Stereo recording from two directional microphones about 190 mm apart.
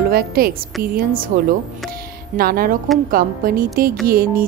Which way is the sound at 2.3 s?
50° right (ahead or behind).